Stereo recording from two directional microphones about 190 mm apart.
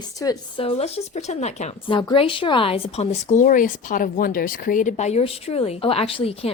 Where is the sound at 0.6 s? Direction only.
35° left (ahead or behind).